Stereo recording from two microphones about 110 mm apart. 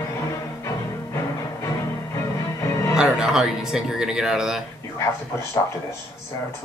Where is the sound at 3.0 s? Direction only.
5° right (ahead or behind).